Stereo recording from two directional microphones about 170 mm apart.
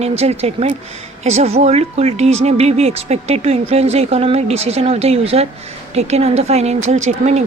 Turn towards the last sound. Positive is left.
turn(degrees=-40)  # may be behind; listen again after turning